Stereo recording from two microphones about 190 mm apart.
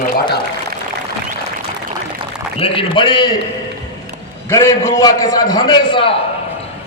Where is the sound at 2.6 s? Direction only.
30° left (ahead or behind).